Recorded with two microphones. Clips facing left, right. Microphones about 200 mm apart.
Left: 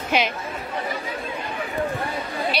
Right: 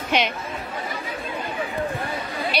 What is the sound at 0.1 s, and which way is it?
Speech, 5° left (ahead or behind).